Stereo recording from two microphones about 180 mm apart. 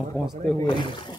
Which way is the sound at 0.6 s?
25° left (ahead or behind).